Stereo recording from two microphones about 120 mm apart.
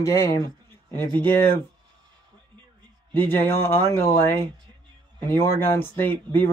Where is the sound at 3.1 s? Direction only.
15° left (ahead or behind).